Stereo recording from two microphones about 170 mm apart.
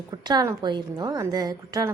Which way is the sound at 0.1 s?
25° right (ahead or behind).